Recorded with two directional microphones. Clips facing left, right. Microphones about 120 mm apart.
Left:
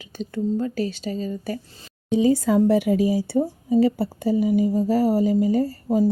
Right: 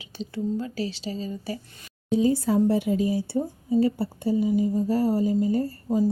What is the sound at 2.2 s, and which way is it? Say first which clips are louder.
A woman's voice: left 4 dB; 90° left.